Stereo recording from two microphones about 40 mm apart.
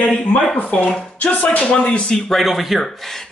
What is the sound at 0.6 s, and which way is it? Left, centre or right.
Speech, left.